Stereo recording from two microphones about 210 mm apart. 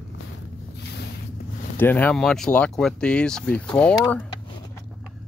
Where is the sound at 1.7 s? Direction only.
10° left (ahead or behind).